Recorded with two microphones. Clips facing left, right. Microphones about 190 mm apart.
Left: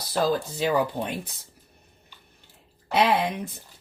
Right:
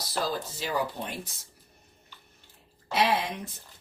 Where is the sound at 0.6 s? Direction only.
60° left (ahead or behind).